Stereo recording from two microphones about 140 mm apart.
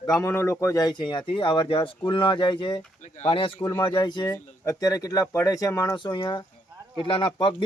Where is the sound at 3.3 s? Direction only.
40° left (ahead or behind).